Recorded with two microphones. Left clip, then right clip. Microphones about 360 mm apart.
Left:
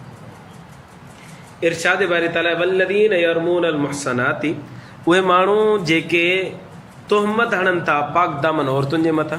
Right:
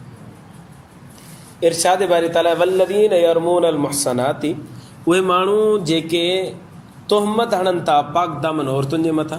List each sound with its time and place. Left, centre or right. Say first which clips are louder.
1.6 s a man's voice: right 2 dB; centre